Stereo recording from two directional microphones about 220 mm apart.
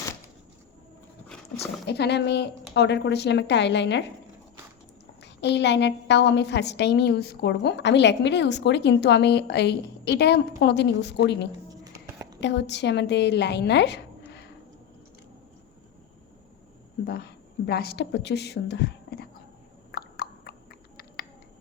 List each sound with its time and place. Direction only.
1.9 s a woman's voice: 50° left (ahead or behind)
5.2 s a woman's voice: 50° left (ahead or behind)
17.7 s a woman's voice: 45° left (ahead or behind)
19.9 s a sound: 45° left (ahead or behind)